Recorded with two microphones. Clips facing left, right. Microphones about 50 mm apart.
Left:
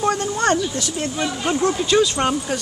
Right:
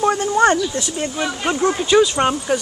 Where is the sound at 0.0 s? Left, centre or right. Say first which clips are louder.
Right 5 dB; centre.